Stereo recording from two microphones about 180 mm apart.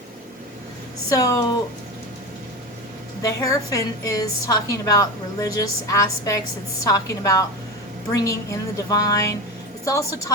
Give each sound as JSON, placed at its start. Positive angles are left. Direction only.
{"t": 1.1, "sound": "a woman's voice", "side_deg": 20}
{"t": 3.2, "sound": "a woman's voice", "side_deg": 20}